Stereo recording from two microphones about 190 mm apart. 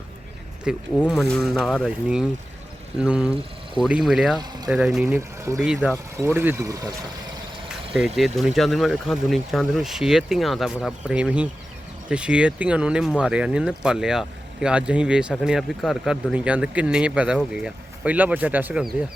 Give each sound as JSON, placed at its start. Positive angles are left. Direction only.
{"t": 0.7, "sound": "speech", "side_deg": -5}
{"t": 4.4, "sound": "speech", "side_deg": -20}
{"t": 4.7, "sound": "speech", "side_deg": -5}
{"t": 7.9, "sound": "speech", "side_deg": 0}